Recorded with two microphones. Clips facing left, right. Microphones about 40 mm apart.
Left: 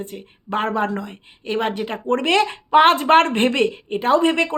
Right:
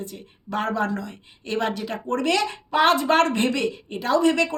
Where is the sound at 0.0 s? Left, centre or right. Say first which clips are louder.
Left 4 dB; left.